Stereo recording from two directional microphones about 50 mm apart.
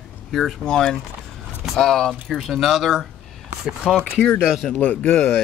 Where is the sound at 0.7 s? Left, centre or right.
Centre.